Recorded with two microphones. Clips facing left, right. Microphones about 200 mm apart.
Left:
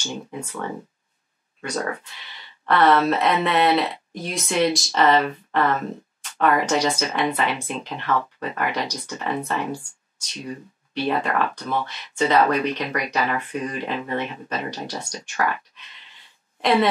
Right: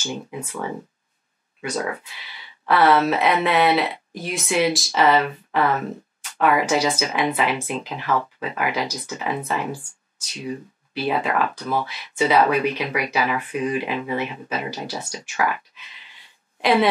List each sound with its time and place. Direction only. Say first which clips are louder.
0.0 s speech: right 1 dB; 5° right (ahead or behind)
2.6 s speech: even; 5° right (ahead or behind)